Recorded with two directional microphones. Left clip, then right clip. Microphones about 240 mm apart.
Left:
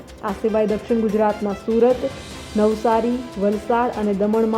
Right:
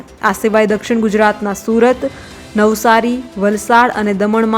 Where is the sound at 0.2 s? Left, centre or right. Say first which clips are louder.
Right 8 dB; right.